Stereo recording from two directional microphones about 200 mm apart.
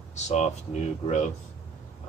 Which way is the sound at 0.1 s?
35° left (ahead or behind).